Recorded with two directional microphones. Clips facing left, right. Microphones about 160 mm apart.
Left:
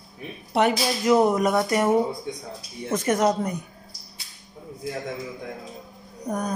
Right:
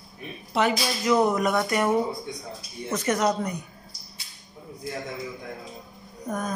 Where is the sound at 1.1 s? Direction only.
25° left (ahead or behind).